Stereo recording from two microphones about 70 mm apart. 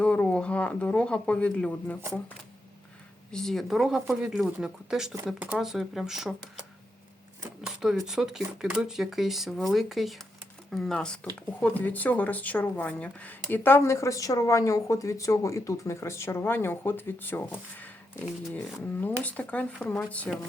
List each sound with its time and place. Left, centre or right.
0.0 s speech: centre
3.3 s speech: centre
4.4 s speech: centre
5.2 s speech: right
5.5 s speech: centre
7.8 s speech: centre
10.9 s speech: centre
11.6 s speech: left
13.8 s speech: left